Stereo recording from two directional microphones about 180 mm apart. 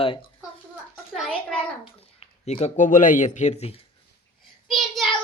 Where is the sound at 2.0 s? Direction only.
35° left (ahead or behind).